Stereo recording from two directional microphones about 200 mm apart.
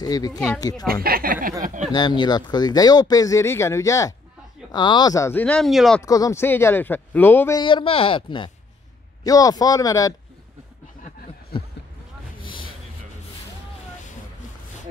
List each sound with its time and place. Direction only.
0.0 s speech: 20° left (ahead or behind)
1.0 s speech: 45° right (ahead or behind)
1.9 s speech: 20° left (ahead or behind); by 6.0 s centre (ahead or behind)
6.0 s speech: 15° left (ahead or behind)
7.6 s speech: 25° left (ahead or behind)